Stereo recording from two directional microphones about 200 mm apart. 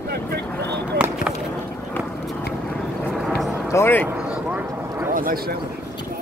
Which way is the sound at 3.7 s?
10° left (ahead or behind).